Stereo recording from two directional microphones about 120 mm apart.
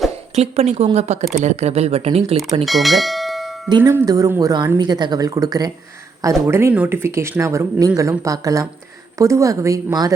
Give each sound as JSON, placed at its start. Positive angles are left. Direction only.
{"t": 0.3, "sound": "speech", "side_deg": -65}
{"t": 2.6, "sound": "bell", "side_deg": 0}
{"t": 3.7, "sound": "speech", "side_deg": -35}